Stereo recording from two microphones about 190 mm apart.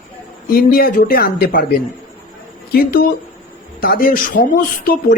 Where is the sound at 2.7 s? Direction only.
50° left (ahead or behind).